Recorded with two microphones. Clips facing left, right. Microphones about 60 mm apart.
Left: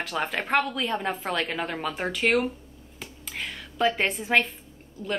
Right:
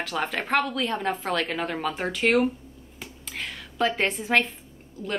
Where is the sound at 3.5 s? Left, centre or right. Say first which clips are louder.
Left 1 dB; centre.